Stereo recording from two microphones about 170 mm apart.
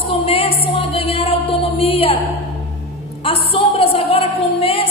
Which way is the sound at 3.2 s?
35° left (ahead or behind).